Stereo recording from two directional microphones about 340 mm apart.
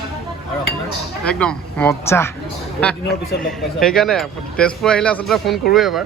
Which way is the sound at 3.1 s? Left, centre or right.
Left.